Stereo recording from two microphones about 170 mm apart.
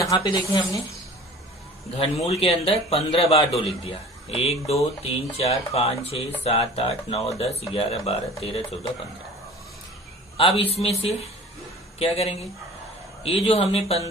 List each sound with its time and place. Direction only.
0.0 s speech: 20° left (ahead or behind)
2.0 s a man's voice: 35° left (ahead or behind)
10.3 s a man's voice: 35° left (ahead or behind)